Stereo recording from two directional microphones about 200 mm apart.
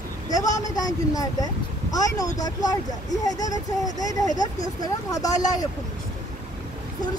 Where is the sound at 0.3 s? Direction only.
20° left (ahead or behind).